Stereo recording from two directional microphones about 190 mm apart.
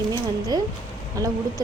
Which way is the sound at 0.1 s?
20° right (ahead or behind).